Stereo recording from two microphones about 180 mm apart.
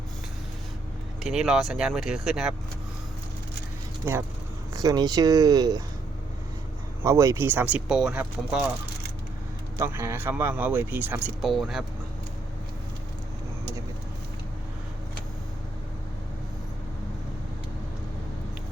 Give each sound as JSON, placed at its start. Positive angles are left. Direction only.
{"t": 1.2, "sound": "speech", "side_deg": 0}
{"t": 4.1, "sound": "speech", "side_deg": -15}
{"t": 7.0, "sound": "speech", "side_deg": -15}
{"t": 9.7, "sound": "speech", "side_deg": -15}